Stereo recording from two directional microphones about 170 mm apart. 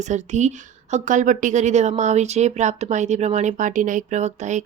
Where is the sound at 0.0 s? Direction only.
45° right (ahead or behind).